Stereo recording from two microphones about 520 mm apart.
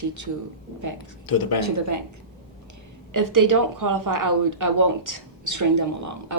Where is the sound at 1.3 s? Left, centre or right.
Left.